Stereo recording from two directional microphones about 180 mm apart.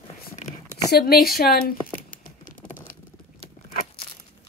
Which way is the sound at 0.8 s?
60° left (ahead or behind).